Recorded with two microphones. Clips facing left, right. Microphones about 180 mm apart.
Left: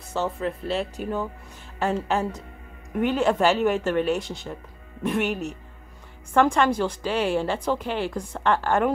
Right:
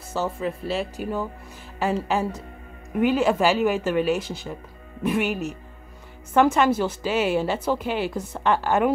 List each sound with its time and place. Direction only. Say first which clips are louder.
0.1 s a woman's voice: even; 5° right (ahead or behind)